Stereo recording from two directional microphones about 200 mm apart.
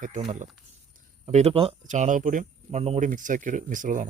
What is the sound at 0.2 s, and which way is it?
Speech, 35° right (ahead or behind).